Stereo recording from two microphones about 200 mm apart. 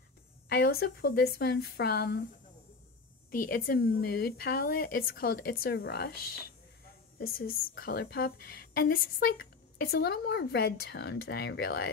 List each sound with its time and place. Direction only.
0.5 s a woman's voice: 50° left (ahead or behind)
3.3 s a woman's voice: 45° left (ahead or behind)